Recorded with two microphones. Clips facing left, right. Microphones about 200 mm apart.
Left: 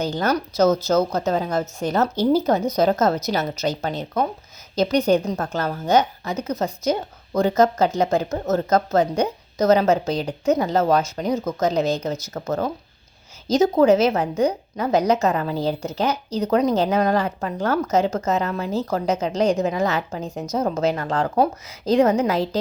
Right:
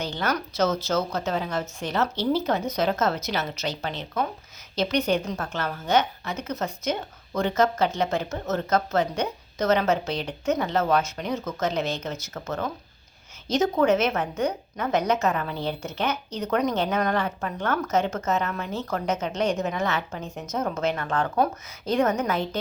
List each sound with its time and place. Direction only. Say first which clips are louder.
0.0 s speech: left 6 dB; 40° left (ahead or behind)